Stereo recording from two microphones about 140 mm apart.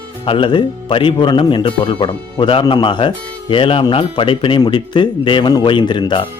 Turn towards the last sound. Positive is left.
turn(degrees=35)  # may be behind; listen again after turning